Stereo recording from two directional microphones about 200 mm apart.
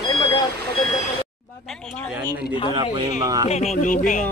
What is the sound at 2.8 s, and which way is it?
Speech, 20° right (ahead or behind).